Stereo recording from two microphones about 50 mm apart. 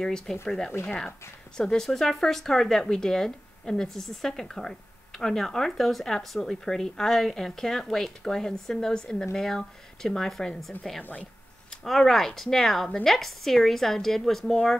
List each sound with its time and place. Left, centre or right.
0.0 s speech: centre
1.9 s speech: centre
11.0 s speech: left
11.7 s speech: centre